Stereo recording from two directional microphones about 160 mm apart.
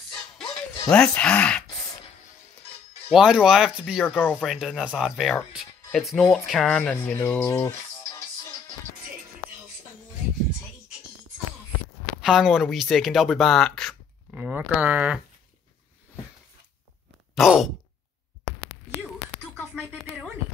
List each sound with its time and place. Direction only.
0.4 s music: 5° left (ahead or behind)
3.1 s speech: 5° right (ahead or behind)
4.2 s speech: 10° left (ahead or behind)
4.5 s speech: centre (ahead or behind)
7.2 s music: 15° left (ahead or behind)
12.2 s speech: 5° right (ahead or behind)
14.3 s speech: 10° right (ahead or behind)
17.4 s speech: centre (ahead or behind)
19.5 s a sound: 10° right (ahead or behind)